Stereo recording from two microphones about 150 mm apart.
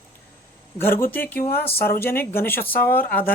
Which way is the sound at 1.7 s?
90° left.